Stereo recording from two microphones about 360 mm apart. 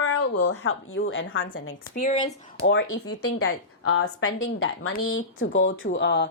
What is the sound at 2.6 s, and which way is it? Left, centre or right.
Speech, left.